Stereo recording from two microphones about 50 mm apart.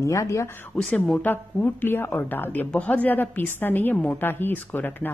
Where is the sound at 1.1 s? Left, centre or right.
Left.